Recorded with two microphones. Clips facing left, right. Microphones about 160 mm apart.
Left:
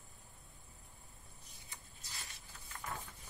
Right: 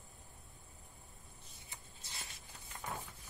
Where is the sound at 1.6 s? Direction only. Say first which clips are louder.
Right 1 dB; 25° right (ahead or behind).